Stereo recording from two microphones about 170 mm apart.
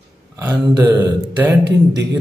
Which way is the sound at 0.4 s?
10° right (ahead or behind).